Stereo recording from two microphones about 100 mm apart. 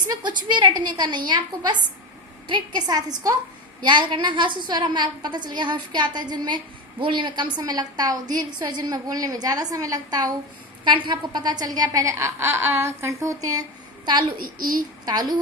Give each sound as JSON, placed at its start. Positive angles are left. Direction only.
{"t": 0.1, "sound": "a woman's voice", "side_deg": -50}
{"t": 10.8, "sound": "a woman's voice", "side_deg": -50}